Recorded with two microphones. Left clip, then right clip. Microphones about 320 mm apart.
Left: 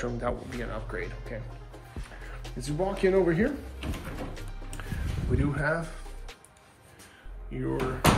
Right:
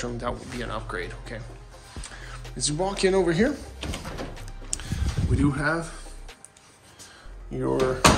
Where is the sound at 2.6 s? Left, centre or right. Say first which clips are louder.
Right 3 dB; centre.